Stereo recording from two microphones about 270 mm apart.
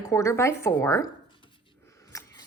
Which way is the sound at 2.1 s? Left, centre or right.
Centre.